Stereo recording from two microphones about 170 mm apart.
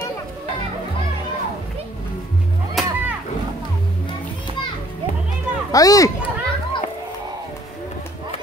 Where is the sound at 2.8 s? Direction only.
Centre (ahead or behind).